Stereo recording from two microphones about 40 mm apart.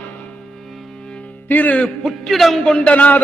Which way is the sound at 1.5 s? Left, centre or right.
Left.